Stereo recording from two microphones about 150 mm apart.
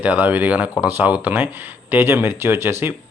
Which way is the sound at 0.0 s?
10° right (ahead or behind).